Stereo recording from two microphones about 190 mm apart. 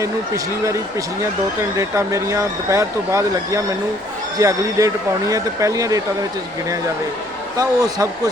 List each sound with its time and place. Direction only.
0.0 s speech: 15° right (ahead or behind)
7.5 s speech: 20° right (ahead or behind)